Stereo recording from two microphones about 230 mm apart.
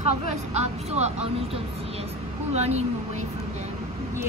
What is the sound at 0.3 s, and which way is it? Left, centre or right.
Speech, right.